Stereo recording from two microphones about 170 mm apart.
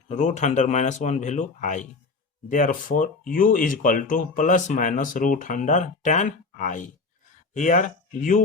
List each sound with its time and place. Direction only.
0.1 s speech: 45° left (ahead or behind)